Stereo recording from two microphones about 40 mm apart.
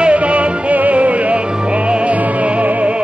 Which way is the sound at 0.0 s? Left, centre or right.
Right.